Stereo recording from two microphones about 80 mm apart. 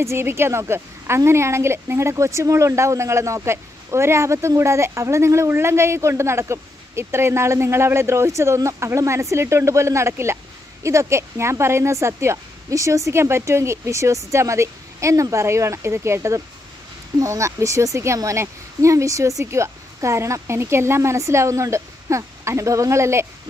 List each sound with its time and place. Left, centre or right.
0.0 s a woman's voice: right